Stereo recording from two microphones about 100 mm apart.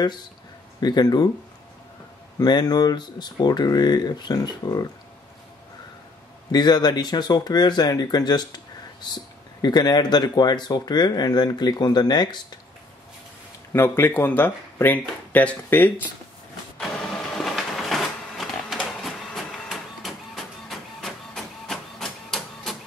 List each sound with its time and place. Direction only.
0.7 s speech: 45° left (ahead or behind)
2.3 s speech: 40° left (ahead or behind)
6.5 s speech: 45° left (ahead or behind)
9.6 s speech: 45° left (ahead or behind)
13.7 s speech: 20° left (ahead or behind)
16.7 s printer: 5° left (ahead or behind)